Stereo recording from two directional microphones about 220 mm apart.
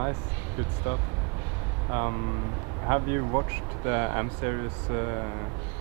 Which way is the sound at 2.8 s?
20° right (ahead or behind).